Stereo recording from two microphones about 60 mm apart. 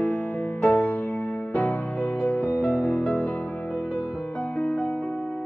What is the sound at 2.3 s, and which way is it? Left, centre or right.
Music, left.